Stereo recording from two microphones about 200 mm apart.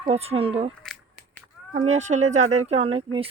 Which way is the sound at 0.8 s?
5° left (ahead or behind).